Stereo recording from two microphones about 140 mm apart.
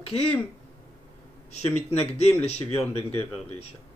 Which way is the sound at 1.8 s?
50° left (ahead or behind).